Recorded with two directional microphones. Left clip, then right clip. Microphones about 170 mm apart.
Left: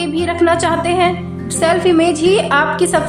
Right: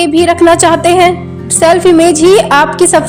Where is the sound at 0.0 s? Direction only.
50° right (ahead or behind).